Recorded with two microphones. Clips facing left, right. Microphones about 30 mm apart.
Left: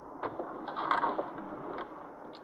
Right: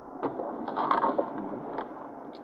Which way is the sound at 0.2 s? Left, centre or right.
Centre.